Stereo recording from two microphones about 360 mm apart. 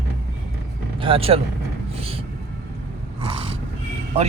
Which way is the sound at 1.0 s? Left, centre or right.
Centre.